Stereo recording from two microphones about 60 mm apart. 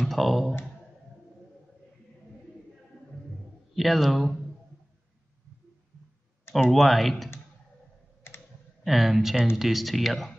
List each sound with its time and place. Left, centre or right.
0.0 s speech: centre
3.7 s speech: centre
6.6 s speech: centre
8.3 s computer keyboard: left
8.8 s speech: centre